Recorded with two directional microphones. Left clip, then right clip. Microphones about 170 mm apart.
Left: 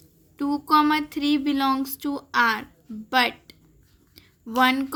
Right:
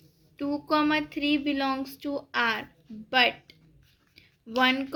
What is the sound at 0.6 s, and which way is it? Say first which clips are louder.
Speech: left 6 dB; 60° left (ahead or behind).